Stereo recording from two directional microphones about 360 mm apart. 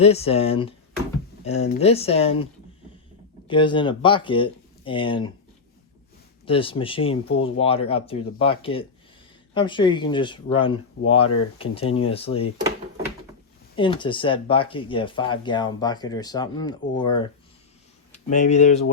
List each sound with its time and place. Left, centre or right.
0.0 s speech: centre
6.4 s speech: centre
13.7 s speech: centre